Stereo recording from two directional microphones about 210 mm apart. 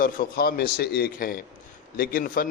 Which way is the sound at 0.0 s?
45° left (ahead or behind).